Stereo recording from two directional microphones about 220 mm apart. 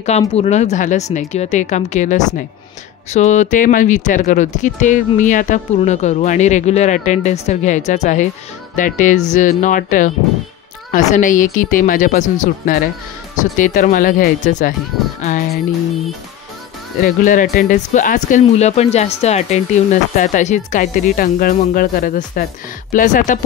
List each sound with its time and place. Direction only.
0.4 s speech: 30° left (ahead or behind)
17.0 s speech: 35° left (ahead or behind)